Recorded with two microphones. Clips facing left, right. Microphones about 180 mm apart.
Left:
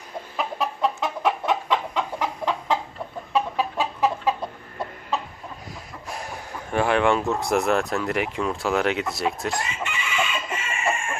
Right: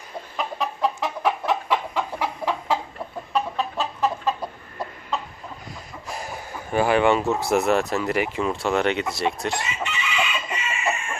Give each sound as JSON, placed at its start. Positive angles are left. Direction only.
{"t": 0.3, "sound": "chicken", "side_deg": 0}
{"t": 3.3, "sound": "chicken", "side_deg": 10}
{"t": 6.1, "sound": "speech", "side_deg": 0}
{"t": 9.9, "sound": "chicken", "side_deg": 50}